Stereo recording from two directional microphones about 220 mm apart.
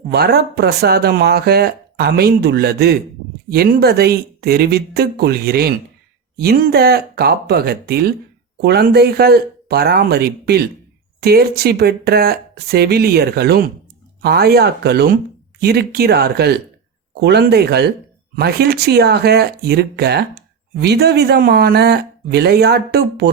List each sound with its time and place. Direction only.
0.1 s speech: 45° right (ahead or behind)